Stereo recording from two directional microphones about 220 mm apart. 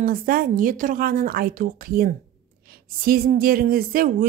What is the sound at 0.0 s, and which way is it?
A woman's voice, 40° right (ahead or behind).